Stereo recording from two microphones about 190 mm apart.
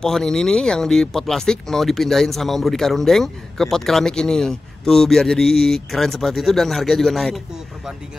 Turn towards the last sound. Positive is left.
turn(degrees=0)  # may be behind; listen again after turning